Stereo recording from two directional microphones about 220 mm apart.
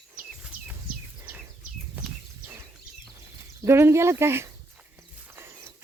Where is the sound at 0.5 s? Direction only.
40° right (ahead or behind).